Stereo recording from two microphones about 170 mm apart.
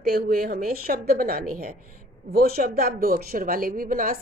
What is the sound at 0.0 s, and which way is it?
A woman's voice, 65° right (ahead or behind).